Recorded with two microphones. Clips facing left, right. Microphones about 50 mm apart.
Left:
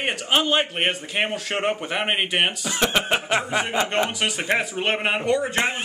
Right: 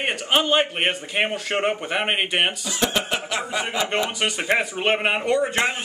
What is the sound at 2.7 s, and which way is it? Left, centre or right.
Speech, left.